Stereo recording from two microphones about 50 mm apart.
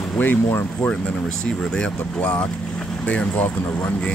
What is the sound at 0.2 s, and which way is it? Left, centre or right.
Speech, left.